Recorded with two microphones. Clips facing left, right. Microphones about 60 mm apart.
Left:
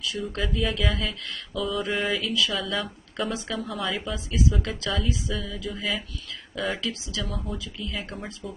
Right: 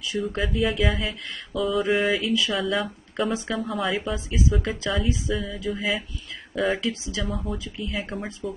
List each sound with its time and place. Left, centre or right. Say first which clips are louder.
0.2 s speech: right 4 dB; centre
4.1 s speech: right 1 dB; right
5.3 s speech: right 4 dB; centre
6.8 s speech: right 3 dB; right
7.2 s speech: right 4 dB; centre
7.5 s speech: right 2 dB; right
7.9 s speech: right 6 dB; centre